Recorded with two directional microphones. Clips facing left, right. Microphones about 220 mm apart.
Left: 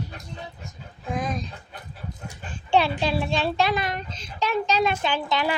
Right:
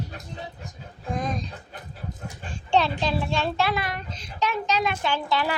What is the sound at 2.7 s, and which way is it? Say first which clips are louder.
A child's voice: left 1 dB; 10° left (ahead or behind).